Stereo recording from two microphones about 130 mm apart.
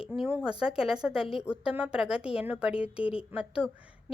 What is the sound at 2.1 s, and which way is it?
Speech, 45° left (ahead or behind).